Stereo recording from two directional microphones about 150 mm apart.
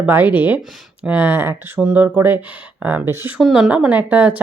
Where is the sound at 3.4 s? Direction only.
5° right (ahead or behind).